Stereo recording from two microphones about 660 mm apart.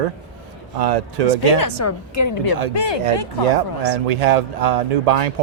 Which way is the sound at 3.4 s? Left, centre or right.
Right.